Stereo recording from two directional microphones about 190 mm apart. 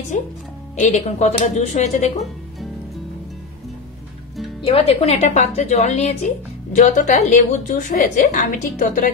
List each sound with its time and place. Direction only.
0.1 s a woman's voice: 40° left (ahead or behind)
4.6 s a woman's voice: 30° left (ahead or behind)